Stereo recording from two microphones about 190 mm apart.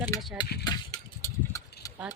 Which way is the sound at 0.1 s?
15° left (ahead or behind).